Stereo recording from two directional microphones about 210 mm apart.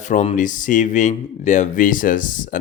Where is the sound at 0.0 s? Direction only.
35° left (ahead or behind).